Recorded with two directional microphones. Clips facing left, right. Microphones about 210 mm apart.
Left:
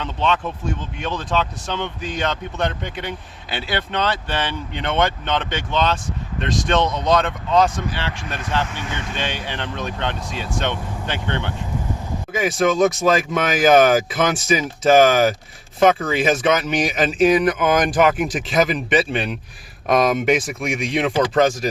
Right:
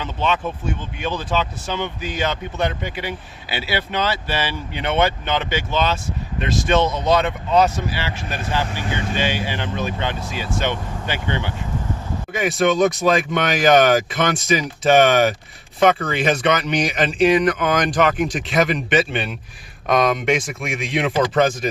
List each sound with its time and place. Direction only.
0.0 s speech: 5° right (ahead or behind)
8.6 s speech: 35° right (ahead or behind)
9.1 s speech: 5° right (ahead or behind)